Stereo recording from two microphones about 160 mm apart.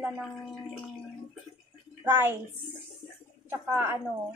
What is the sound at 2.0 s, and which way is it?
Speech, 15° right (ahead or behind).